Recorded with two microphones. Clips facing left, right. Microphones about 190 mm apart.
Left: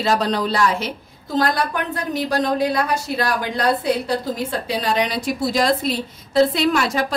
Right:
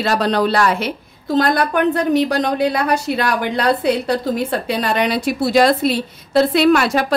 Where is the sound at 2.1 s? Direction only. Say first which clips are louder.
Right 4 dB; 70° right (ahead or behind).